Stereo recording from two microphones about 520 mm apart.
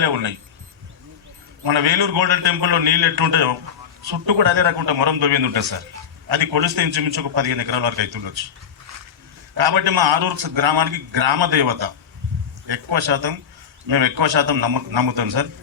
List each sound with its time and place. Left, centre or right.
0.0 s a man's voice: right
1.6 s a man's voice: right
9.6 s a man's voice: right